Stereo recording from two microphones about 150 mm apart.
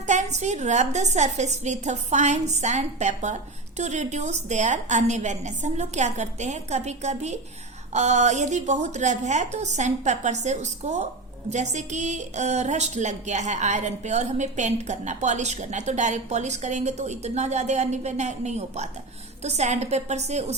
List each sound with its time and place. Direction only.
0.1 s a woman's voice: 50° right (ahead or behind)